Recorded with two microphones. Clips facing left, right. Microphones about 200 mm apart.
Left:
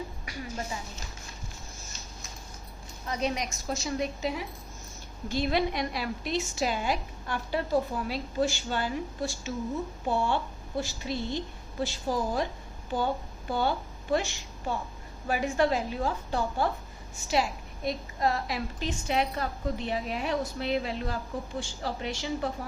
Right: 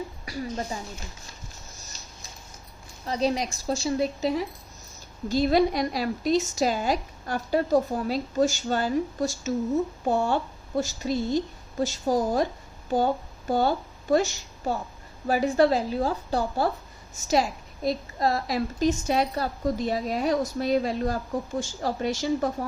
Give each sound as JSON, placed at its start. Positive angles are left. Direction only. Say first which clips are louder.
{"t": 0.3, "sound": "a sound", "louder": "right 6 dB", "side_deg": -35}
{"t": 3.1, "sound": "a woman's voice", "louder": "right 5 dB", "side_deg": -35}
{"t": 13.5, "sound": "a woman's voice", "louder": "right 5 dB", "side_deg": -40}